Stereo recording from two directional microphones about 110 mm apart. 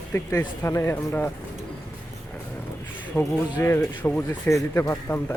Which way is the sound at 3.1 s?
20° left (ahead or behind).